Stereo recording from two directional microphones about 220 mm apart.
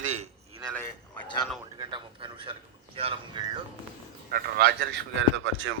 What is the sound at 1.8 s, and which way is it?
A man's voice, 20° right (ahead or behind).